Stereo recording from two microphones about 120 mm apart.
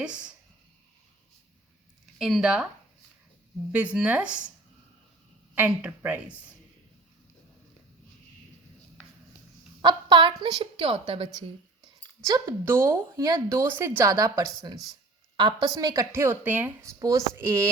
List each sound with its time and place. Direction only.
0.0 s speech: 5° right (ahead or behind)
2.1 s speech: 5° right (ahead or behind)
3.7 s speech: 10° right (ahead or behind)
5.5 s speech: 15° right (ahead or behind)
9.8 s a sound: 40° right (ahead or behind)
10.4 s a woman's voice: 45° right (ahead or behind)
12.2 s speech: 25° right (ahead or behind)
15.6 s speech: 30° right (ahead or behind)